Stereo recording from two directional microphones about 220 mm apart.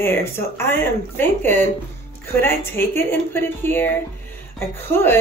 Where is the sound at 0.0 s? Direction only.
10° left (ahead or behind).